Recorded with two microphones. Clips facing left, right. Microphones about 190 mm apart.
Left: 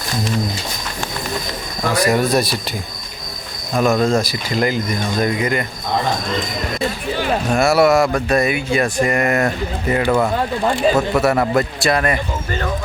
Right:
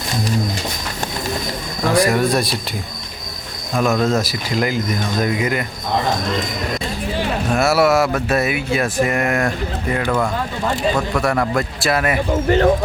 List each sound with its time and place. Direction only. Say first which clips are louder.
1.9 s speech: even; centre (ahead or behind)
3.8 s speech: left 2 dB; centre (ahead or behind)
7.4 s speech: left 2 dB; centre (ahead or behind)
12.3 s speech: right 9 dB; 60° right (ahead or behind)